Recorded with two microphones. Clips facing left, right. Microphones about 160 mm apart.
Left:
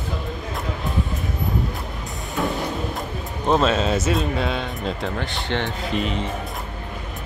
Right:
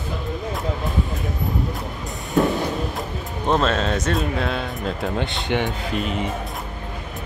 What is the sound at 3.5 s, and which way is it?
Speech, 5° left (ahead or behind).